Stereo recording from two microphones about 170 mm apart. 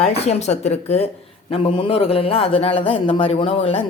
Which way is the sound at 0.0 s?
40° left (ahead or behind).